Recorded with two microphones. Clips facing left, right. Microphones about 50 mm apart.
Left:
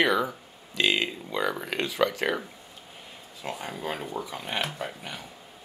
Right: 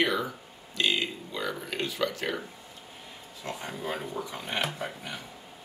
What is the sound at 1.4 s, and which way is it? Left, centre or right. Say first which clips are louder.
Speech: left 4 dB; centre.